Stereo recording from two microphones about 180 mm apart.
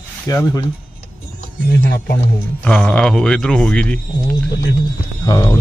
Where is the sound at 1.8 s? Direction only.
70° left (ahead or behind).